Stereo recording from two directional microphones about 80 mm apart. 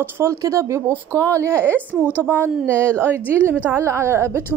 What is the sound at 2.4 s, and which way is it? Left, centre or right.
A woman's voice, right.